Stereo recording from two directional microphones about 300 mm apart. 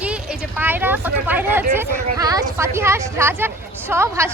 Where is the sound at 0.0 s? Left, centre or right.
Centre.